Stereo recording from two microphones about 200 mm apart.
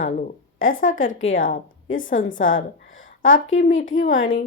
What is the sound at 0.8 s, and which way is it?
Speech, 75° left (ahead or behind).